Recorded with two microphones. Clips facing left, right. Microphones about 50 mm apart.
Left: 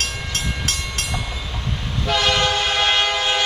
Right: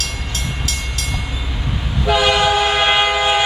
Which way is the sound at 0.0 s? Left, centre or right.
Left.